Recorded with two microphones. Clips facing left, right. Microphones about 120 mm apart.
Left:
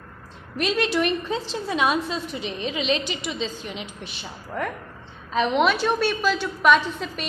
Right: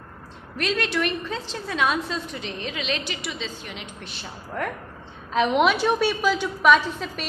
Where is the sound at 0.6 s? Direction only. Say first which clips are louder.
Left 2 dB; 20° left (ahead or behind).